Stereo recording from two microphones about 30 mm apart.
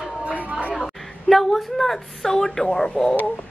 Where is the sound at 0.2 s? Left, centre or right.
Right.